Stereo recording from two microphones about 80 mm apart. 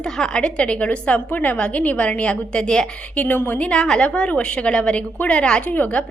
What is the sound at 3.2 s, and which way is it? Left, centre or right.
A woman's voice, left.